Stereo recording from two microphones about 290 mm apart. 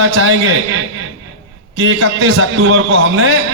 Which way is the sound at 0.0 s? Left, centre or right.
Right.